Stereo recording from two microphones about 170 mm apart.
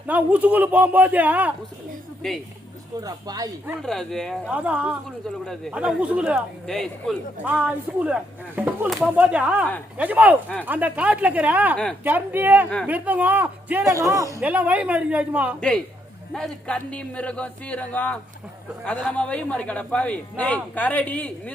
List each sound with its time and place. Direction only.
0.1 s speech: 10° right (ahead or behind)
2.2 s a man's voice: 5° left (ahead or behind)
3.0 s speech: 20° right (ahead or behind)
3.8 s a man's voice: 5° left (ahead or behind)
7.4 s speech: 5° right (ahead or behind)
16.3 s a man's voice: centre (ahead or behind)